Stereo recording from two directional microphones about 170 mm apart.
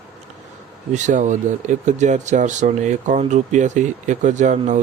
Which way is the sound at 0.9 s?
45° right (ahead or behind).